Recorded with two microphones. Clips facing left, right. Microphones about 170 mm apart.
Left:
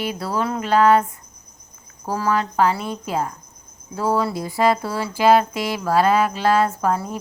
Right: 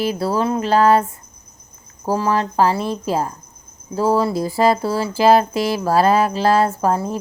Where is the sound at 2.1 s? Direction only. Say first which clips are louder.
Right 3 dB; 30° right (ahead or behind).